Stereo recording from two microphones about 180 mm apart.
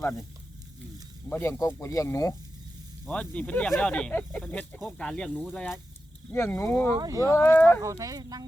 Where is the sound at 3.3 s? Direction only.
10° left (ahead or behind).